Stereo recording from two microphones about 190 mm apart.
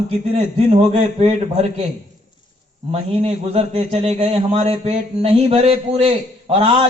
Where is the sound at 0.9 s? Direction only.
40° right (ahead or behind).